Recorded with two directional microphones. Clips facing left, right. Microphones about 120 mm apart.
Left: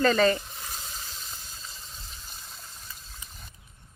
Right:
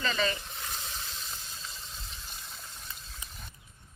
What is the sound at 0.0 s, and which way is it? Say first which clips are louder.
Speech: left 9 dB; 45° left (ahead or behind).